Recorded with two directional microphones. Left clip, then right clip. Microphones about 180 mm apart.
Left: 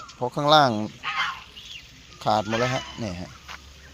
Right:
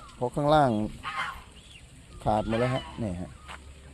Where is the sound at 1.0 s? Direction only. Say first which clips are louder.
Left 6 dB; 80° right.